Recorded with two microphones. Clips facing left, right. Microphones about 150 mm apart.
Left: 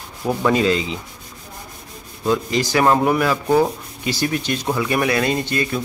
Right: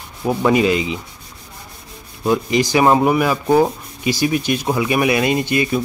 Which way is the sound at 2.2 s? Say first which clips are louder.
Right 3 dB; 15° right (ahead or behind).